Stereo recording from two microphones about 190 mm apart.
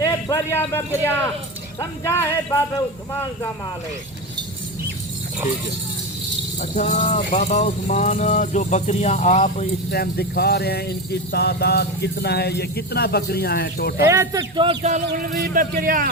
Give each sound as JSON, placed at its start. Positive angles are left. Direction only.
{"t": 0.0, "sound": "a man's voice", "side_deg": 15}
{"t": 6.6, "sound": "speech", "side_deg": 40}
{"t": 9.9, "sound": "speech", "side_deg": 55}
{"t": 14.1, "sound": "a man's voice", "side_deg": -15}